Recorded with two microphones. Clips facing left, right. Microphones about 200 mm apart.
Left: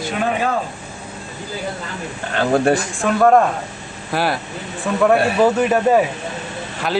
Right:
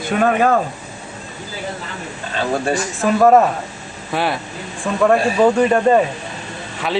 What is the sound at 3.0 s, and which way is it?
Speech, 5° right (ahead or behind).